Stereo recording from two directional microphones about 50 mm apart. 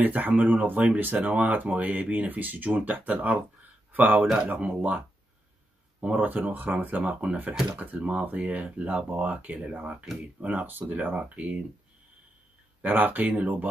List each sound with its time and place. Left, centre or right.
0.0 s speech: right
12.8 s speech: right